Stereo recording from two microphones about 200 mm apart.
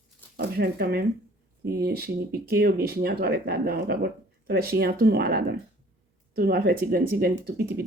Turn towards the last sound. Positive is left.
turn(degrees=-50)  # may be behind; listen again after turning